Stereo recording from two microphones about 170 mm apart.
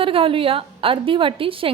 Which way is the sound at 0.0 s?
30° right (ahead or behind).